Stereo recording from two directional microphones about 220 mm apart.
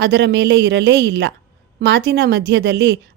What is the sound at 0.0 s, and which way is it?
A woman's voice, 50° right (ahead or behind).